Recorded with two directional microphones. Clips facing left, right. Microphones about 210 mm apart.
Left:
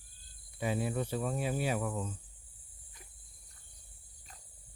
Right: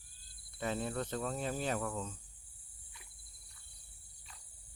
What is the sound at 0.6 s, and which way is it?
Speech, 10° left (ahead or behind).